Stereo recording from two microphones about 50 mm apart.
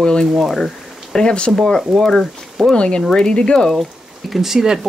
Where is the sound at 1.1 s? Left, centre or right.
Centre.